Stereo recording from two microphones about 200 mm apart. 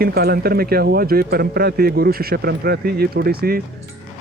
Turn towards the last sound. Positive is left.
turn(degrees=-50)  # may be behind; listen again after turning